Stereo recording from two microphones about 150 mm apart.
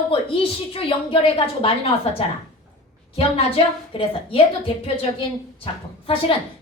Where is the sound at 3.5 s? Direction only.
35° left (ahead or behind).